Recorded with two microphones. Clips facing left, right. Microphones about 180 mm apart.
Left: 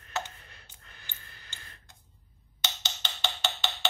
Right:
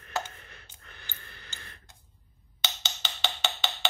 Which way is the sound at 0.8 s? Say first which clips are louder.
Right 4 dB; 65° right (ahead or behind).